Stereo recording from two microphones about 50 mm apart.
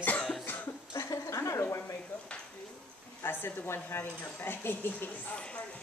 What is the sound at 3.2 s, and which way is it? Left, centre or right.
A woman's voice, left.